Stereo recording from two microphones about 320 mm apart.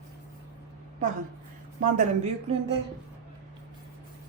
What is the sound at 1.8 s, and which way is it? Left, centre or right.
Speech, right.